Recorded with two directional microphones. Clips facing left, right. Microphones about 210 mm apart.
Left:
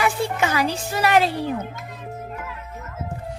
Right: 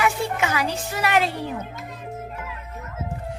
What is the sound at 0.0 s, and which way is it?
Music, 35° left (ahead or behind).